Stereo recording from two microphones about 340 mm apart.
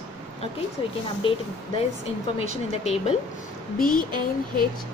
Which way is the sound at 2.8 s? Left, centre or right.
Centre.